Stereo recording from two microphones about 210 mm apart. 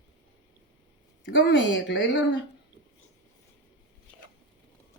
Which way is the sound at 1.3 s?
60° left (ahead or behind).